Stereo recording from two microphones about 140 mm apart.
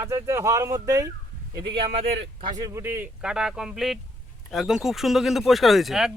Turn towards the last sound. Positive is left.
turn(degrees=0)  # may be behind; listen again after turning